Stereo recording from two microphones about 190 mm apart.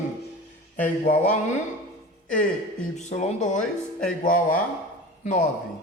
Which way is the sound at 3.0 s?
40° left (ahead or behind).